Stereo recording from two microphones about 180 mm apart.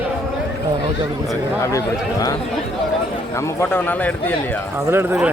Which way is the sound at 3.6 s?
10° left (ahead or behind).